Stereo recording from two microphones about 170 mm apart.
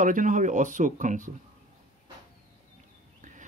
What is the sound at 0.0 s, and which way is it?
Speech, 50° right (ahead or behind).